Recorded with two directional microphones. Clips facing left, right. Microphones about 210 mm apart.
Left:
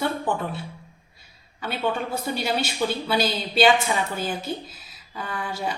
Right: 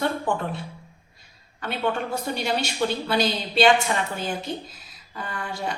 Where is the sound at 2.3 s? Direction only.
5° left (ahead or behind).